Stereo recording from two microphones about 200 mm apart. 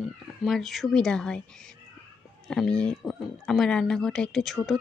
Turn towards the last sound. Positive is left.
turn(degrees=0)  # may be behind; listen again after turning